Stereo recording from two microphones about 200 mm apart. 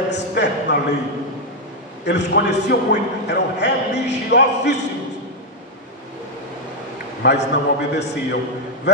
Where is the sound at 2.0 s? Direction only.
60° left (ahead or behind).